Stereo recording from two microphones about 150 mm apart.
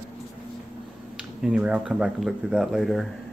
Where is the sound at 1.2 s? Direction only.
5° right (ahead or behind).